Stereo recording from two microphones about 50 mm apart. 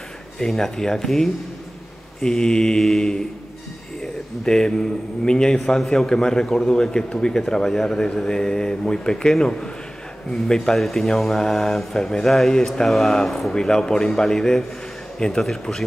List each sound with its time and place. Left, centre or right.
0.4 s speech: centre
4.5 s speech: centre